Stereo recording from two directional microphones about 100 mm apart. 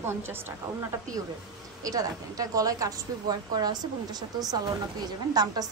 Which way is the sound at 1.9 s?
35° right (ahead or behind).